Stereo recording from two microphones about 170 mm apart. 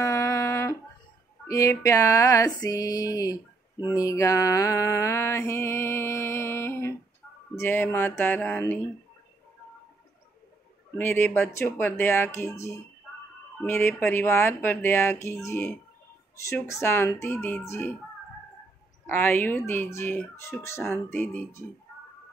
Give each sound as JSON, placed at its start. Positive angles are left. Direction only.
{"t": 0.0, "sound": "a sound", "side_deg": 20}
{"t": 3.9, "sound": "mantra", "side_deg": 20}
{"t": 11.0, "sound": "mantra", "side_deg": 10}
{"t": 13.6, "sound": "mantra", "side_deg": 15}
{"t": 19.0, "sound": "mantra", "side_deg": 15}